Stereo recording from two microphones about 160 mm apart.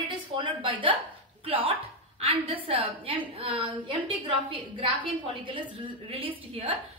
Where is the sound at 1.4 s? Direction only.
35° right (ahead or behind).